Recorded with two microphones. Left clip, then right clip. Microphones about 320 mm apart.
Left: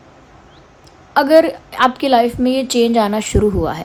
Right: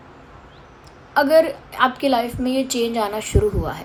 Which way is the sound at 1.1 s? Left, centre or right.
Left.